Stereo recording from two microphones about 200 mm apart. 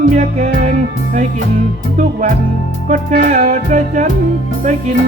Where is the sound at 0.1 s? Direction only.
35° right (ahead or behind).